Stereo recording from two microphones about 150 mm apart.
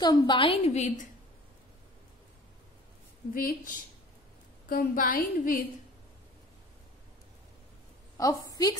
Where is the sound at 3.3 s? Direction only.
70° left (ahead or behind).